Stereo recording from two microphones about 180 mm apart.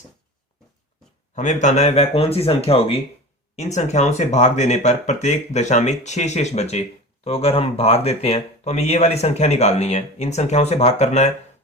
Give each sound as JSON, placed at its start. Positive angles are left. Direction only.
{"t": 1.4, "sound": "speech", "side_deg": 40}